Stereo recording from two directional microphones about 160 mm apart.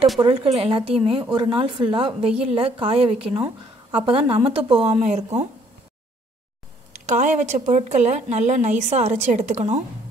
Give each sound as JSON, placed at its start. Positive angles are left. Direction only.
{"t": 0.3, "sound": "a woman's voice", "side_deg": -35}
{"t": 7.1, "sound": "a woman's voice", "side_deg": -45}